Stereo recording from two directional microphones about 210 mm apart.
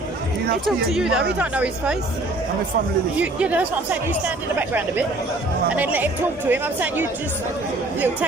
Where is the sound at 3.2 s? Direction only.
5° right (ahead or behind).